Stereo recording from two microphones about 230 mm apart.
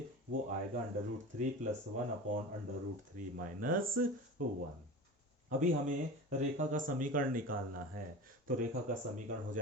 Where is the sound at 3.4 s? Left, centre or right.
Right.